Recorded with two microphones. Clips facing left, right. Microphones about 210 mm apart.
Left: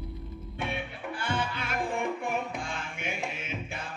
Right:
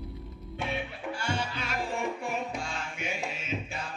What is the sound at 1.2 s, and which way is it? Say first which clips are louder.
Music: left 2 dB; 55° left (ahead or behind).